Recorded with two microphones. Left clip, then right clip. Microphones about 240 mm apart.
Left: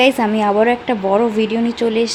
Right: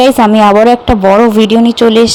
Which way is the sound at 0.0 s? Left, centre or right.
Right.